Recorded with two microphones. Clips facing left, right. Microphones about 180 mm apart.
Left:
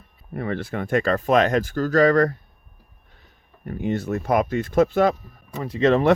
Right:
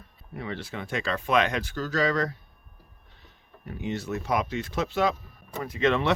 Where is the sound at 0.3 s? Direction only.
55° left (ahead or behind).